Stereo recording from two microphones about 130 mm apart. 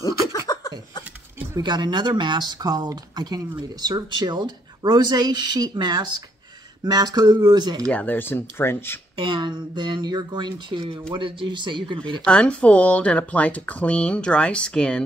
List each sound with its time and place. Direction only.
0.5 s a sound: 30° left (ahead or behind)
1.6 s speech: 35° right (ahead or behind)
7.8 s speech: 10° left (ahead or behind)
9.1 s speech: 40° right (ahead or behind)
12.3 s speech: 10° left (ahead or behind)